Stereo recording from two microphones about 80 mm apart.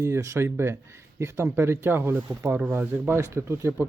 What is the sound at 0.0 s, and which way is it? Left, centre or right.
Speech, right.